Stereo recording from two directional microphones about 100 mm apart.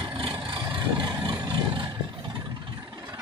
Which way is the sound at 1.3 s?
50° right (ahead or behind).